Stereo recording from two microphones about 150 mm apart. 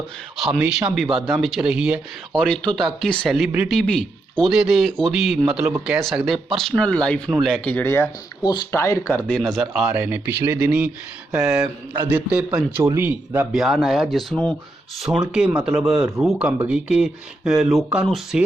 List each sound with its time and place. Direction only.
0.3 s speech: centre (ahead or behind)
2.3 s speech: 5° left (ahead or behind)
9.2 s speech: 5° left (ahead or behind)
9.8 s speech: 10° right (ahead or behind)
13.5 s speech: centre (ahead or behind)